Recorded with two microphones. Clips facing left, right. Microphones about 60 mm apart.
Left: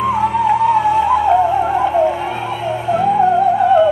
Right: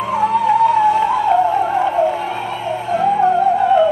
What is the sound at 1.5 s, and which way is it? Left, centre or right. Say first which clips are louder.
Theremin: left 1 dB; centre.